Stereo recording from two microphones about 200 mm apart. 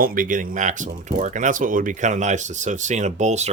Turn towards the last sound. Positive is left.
turn(degrees=-35)  # may be behind; listen again after turning